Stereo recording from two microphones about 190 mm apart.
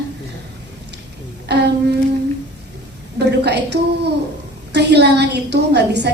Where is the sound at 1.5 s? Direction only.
60° right (ahead or behind).